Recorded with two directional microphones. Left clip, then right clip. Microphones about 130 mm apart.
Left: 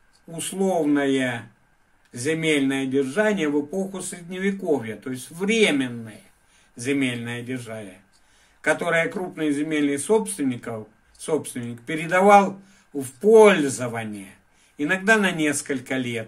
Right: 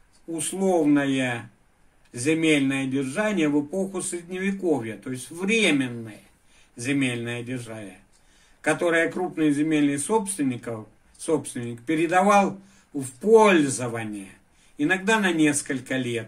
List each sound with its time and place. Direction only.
0.4 s a man's voice: 50° left (ahead or behind)